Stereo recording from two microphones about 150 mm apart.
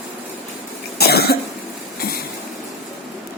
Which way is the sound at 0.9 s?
90° left.